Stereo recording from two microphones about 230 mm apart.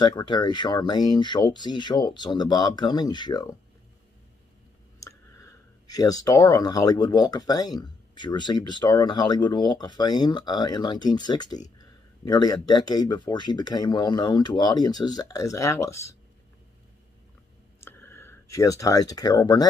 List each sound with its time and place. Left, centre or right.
0.0 s speech: centre
5.0 s speech: centre
11.8 s a sound: centre
12.6 s speech: centre
17.7 s clicking: centre